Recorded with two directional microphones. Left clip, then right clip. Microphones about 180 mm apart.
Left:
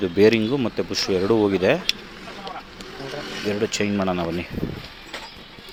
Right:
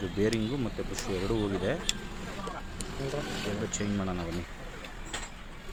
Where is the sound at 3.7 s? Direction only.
45° left (ahead or behind).